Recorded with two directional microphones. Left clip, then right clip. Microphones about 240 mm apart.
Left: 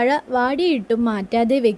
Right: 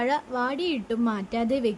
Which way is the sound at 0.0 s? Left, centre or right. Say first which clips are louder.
Left 7 dB; left.